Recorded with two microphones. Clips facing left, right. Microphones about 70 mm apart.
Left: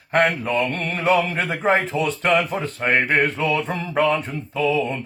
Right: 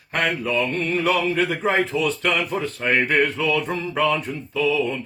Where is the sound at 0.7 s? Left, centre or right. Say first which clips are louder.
Left 2 dB; left.